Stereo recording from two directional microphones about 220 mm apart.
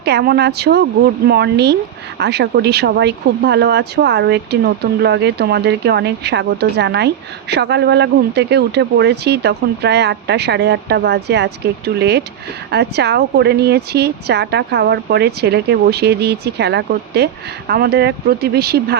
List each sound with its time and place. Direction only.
0.0 s speech: 45° right (ahead or behind)